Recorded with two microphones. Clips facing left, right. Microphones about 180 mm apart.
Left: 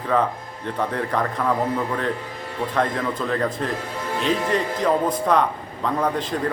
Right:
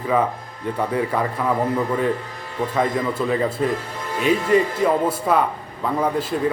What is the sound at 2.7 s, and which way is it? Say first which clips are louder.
A man's voice: right 2 dB; 10° right (ahead or behind).